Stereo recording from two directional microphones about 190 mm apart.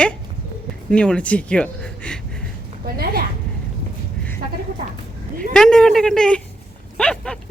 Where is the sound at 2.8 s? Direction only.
50° right (ahead or behind).